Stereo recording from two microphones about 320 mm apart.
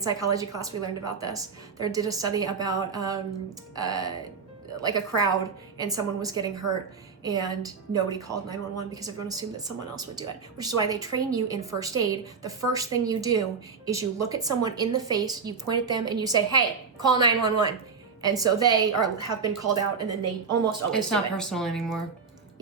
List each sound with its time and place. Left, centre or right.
0.0 s a woman's voice: centre
20.1 s a woman's voice: right
20.9 s speech: centre